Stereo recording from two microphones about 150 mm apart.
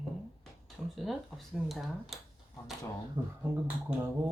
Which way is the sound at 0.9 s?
Centre (ahead or behind).